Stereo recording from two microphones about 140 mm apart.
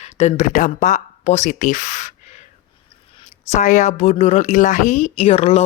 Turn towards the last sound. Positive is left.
turn(degrees=50)  # may be behind; listen again after turning